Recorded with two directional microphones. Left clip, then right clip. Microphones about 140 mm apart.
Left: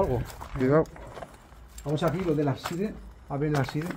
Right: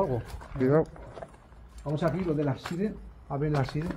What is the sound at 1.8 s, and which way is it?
Speech, 65° left (ahead or behind).